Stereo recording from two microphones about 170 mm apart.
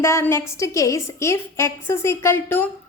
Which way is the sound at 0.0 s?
15° left (ahead or behind).